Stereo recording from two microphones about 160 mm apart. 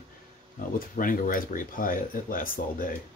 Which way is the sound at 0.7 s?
60° left (ahead or behind).